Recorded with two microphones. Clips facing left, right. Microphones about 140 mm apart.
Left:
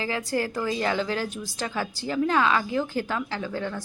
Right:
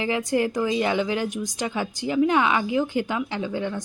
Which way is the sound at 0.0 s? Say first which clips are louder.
Right 4 dB; 20° right (ahead or behind).